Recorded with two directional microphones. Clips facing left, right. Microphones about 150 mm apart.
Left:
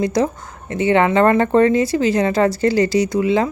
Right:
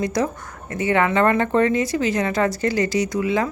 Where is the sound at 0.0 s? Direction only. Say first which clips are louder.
Left 4 dB; 30° left (ahead or behind).